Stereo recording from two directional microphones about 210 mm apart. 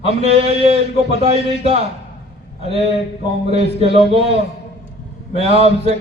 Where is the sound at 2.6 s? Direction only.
30° right (ahead or behind).